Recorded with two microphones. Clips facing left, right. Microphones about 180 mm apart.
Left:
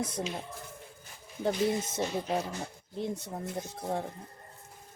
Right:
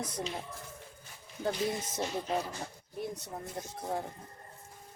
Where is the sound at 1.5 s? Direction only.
20° left (ahead or behind).